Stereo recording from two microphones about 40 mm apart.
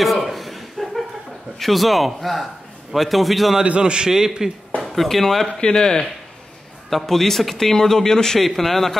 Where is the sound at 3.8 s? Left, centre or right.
Right.